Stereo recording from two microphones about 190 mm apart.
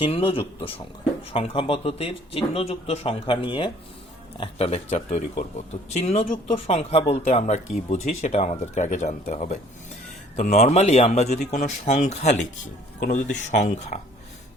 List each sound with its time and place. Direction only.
0.0 s a man's voice: 30° left (ahead or behind)